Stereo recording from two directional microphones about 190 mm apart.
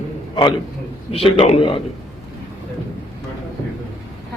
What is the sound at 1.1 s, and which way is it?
Speech, 30° left (ahead or behind).